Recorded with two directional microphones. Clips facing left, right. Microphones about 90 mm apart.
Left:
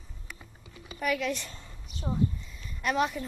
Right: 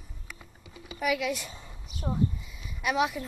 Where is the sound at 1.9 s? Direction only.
5° right (ahead or behind).